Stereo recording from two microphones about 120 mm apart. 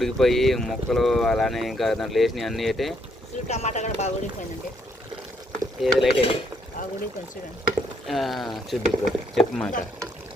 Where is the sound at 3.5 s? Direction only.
75° left (ahead or behind).